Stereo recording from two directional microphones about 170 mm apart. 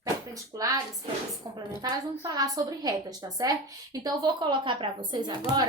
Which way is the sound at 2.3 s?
20° right (ahead or behind).